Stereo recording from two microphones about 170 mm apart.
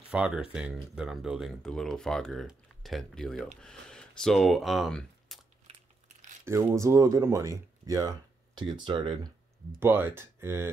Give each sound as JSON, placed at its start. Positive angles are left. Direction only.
{"t": 0.1, "sound": "speech", "side_deg": -5}
{"t": 5.7, "sound": "biting", "side_deg": -35}
{"t": 6.4, "sound": "speech", "side_deg": -15}
{"t": 9.8, "sound": "speech", "side_deg": -15}